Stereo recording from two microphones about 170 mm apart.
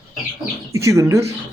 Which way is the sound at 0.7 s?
15° right (ahead or behind).